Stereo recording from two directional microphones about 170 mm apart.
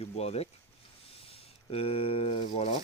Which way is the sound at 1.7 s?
35° left (ahead or behind).